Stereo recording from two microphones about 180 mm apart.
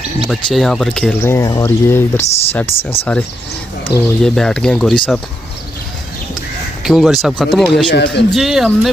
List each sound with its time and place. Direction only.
0.3 s speech: centre (ahead or behind)
1.2 s speech: 15° left (ahead or behind)
2.2 s speech: 35° left (ahead or behind)
3.8 s speech: 5° left (ahead or behind)
6.8 s speech: centre (ahead or behind)
7.9 s speech: 65° left (ahead or behind)
8.3 s speech: centre (ahead or behind)